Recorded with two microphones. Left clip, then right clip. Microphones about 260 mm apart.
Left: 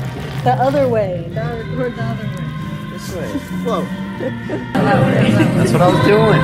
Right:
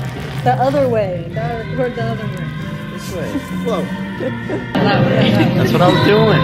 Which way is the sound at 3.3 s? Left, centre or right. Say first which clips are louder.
Even; centre.